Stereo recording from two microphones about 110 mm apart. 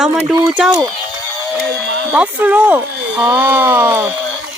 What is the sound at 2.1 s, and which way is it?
Speech, 10° right (ahead or behind).